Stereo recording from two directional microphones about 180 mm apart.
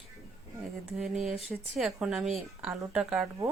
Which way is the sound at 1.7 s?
Centre (ahead or behind).